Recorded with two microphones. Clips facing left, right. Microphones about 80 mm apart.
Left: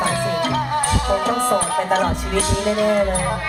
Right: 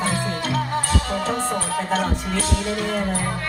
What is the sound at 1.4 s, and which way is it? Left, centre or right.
Music, left.